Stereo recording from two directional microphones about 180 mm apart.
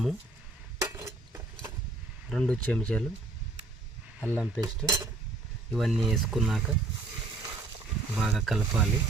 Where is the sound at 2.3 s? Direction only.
5° left (ahead or behind).